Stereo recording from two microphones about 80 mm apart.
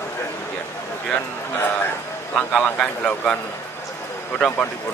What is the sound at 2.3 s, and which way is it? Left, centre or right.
Speech, centre.